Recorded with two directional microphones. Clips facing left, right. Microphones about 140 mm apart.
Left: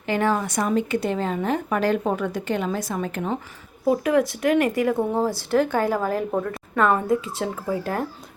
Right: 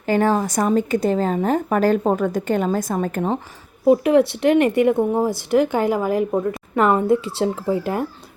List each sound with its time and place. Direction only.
0.0 s speech: 40° right (ahead or behind)
3.8 s speech: 25° right (ahead or behind)